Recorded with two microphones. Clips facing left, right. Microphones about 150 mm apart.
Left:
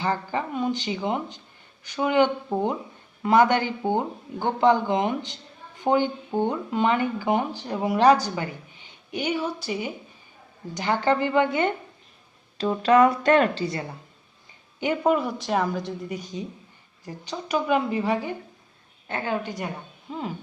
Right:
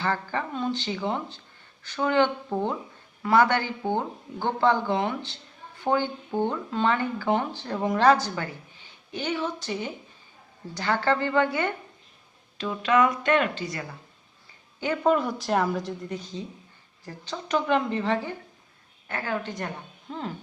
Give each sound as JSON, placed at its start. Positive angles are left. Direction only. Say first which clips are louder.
{"t": 0.0, "sound": "speech", "louder": "left 2 dB", "side_deg": 15}
{"t": 12.5, "sound": "speech", "louder": "left 4 dB", "side_deg": 35}
{"t": 14.8, "sound": "speech", "louder": "left 1 dB", "side_deg": 15}
{"t": 15.1, "sound": "a woman's voice", "louder": "even", "side_deg": 0}
{"t": 16.1, "sound": "a woman's voice", "louder": "left 2 dB", "side_deg": 15}